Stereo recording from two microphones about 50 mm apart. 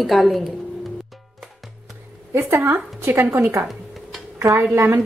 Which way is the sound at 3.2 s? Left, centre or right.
Right.